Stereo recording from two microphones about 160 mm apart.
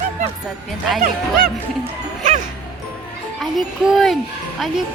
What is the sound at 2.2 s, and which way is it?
Music, 50° right (ahead or behind).